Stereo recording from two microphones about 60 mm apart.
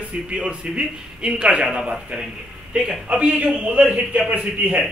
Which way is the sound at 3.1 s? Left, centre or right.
Right.